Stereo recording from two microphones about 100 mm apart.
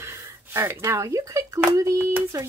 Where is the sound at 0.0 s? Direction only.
25° right (ahead or behind).